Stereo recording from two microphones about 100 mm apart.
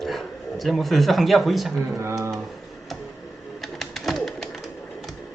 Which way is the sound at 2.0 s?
25° right (ahead or behind).